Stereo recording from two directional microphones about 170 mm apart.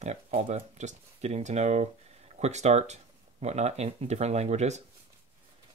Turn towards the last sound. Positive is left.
turn(degrees=-40)  # may be behind; listen again after turning